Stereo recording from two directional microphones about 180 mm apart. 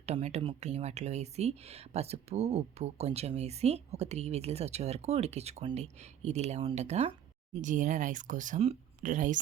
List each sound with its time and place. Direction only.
0.0 s speech: 35° right (ahead or behind)